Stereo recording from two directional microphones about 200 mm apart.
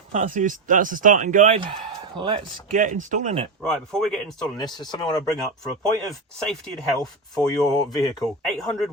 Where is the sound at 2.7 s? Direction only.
40° right (ahead or behind).